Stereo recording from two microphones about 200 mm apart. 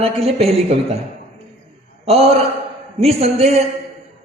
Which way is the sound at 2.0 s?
30° right (ahead or behind).